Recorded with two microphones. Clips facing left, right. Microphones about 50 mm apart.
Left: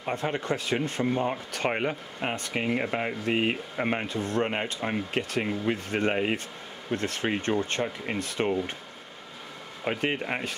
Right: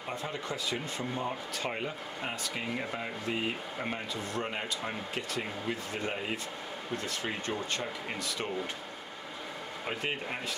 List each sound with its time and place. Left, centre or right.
0.1 s speech: left
9.8 s speech: left